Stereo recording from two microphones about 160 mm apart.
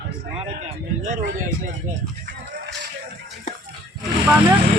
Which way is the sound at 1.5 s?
15° left (ahead or behind).